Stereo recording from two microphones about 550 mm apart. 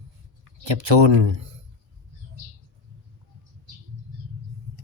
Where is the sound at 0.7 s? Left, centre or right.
Right.